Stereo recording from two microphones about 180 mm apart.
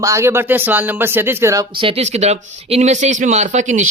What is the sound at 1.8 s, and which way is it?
A man's voice, 35° right (ahead or behind).